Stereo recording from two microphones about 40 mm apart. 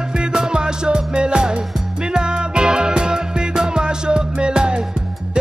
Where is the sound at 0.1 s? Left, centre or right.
Right.